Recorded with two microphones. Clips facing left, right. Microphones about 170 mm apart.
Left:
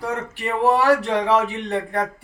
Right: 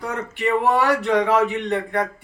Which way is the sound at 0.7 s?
35° left (ahead or behind).